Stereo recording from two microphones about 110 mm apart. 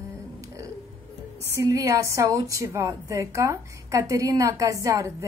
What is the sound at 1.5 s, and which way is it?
A woman's voice, 30° right (ahead or behind).